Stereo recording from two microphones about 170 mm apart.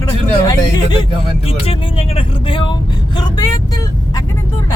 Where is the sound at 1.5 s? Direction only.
30° left (ahead or behind).